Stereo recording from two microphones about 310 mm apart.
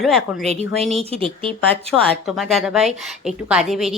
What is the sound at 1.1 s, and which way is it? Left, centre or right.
Speech, centre.